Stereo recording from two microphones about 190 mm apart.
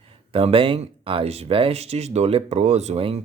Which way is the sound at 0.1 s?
30° right (ahead or behind).